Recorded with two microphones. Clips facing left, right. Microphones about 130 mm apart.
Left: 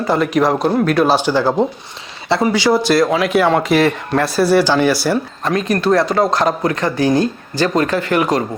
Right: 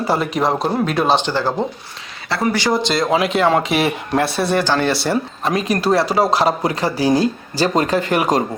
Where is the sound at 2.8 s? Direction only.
20° right (ahead or behind).